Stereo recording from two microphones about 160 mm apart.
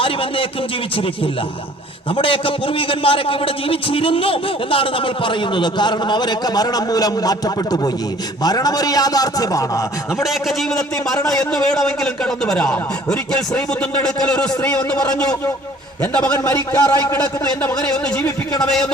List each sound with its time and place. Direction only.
0.0 s a man's voice: 35° left (ahead or behind)
10.2 s a man's voice: centre (ahead or behind)
16.5 s a man's voice: 25° left (ahead or behind)
17.6 s a man's voice: 10° left (ahead or behind)